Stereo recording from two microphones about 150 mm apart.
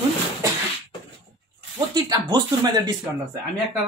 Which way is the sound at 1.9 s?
25° right (ahead or behind).